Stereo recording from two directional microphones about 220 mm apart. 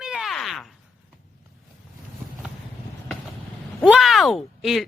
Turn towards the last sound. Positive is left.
turn(degrees=0)  # may be behind; listen again after turning